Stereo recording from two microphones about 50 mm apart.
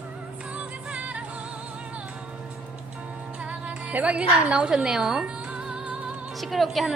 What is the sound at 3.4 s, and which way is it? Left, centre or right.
Music, right.